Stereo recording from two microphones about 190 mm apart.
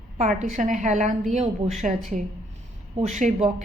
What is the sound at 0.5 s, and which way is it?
A woman's voice, 40° right (ahead or behind).